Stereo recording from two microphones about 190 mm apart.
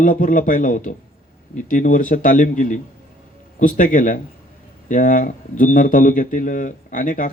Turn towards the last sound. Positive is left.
turn(degrees=45)  # may be behind; listen again after turning